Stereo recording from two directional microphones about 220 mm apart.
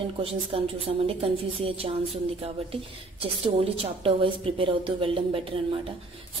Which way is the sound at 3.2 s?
25° right (ahead or behind).